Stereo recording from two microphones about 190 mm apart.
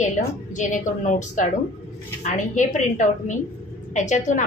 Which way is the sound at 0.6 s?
40° left (ahead or behind).